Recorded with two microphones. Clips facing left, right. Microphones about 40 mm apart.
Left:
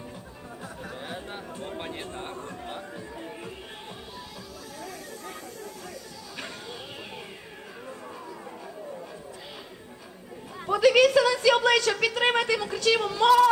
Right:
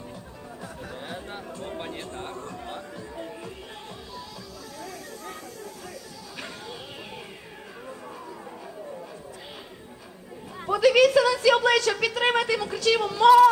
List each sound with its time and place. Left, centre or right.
0.9 s a sound: centre
2.1 s a man's voice: centre
2.9 s music: left
10.7 s a woman's voice: centre